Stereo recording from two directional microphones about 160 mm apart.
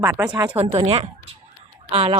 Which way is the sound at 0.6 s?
35° right (ahead or behind).